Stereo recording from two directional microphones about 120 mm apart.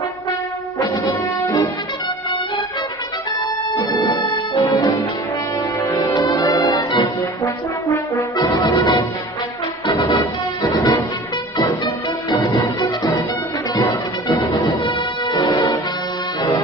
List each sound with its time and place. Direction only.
3.9 s music: 35° left (ahead or behind)
5.9 s brass instrument: 30° left (ahead or behind)
8.5 s music: 35° left (ahead or behind)
13.7 s music: 30° left (ahead or behind)